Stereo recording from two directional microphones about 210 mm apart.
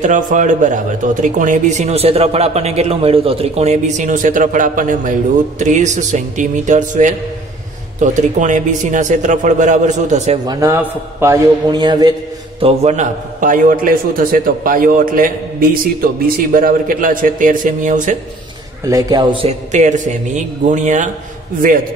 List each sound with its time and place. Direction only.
0.0 s speech: 35° right (ahead or behind)
10.4 s a man's voice: 15° right (ahead or behind); by 18.1 s 40° right (ahead or behind)
18.9 s a man's voice: 15° right (ahead or behind)
19.4 s speech: 35° right (ahead or behind)